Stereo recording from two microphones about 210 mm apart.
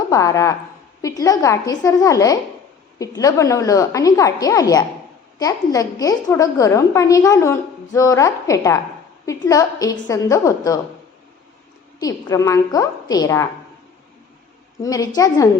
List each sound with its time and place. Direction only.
0.1 s a woman's voice: 15° left (ahead or behind)
11.9 s a woman's voice: 15° left (ahead or behind)
14.8 s a woman's voice: 15° left (ahead or behind)